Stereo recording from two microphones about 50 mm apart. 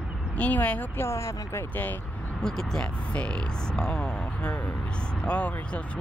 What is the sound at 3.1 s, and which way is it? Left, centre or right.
Speech, left.